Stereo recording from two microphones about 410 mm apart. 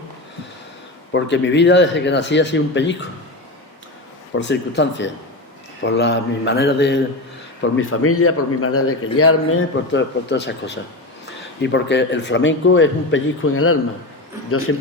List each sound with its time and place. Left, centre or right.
1.1 s speech: left
4.4 s a man's voice: left